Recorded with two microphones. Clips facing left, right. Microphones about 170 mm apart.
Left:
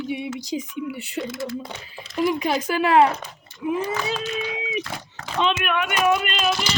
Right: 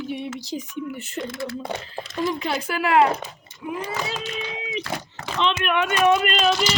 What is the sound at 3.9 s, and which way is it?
Speech, 20° right (ahead or behind).